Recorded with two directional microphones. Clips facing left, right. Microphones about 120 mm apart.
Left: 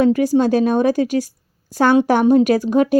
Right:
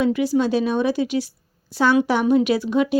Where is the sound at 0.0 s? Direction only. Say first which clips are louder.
Left 5 dB; 45° left (ahead or behind).